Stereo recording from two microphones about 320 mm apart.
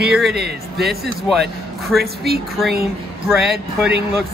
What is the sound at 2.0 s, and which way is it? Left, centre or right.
Speech, right.